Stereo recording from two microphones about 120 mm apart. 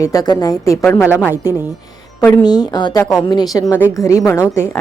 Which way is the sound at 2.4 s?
35° left (ahead or behind).